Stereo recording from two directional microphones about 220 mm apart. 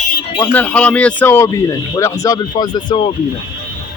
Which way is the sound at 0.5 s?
5° left (ahead or behind).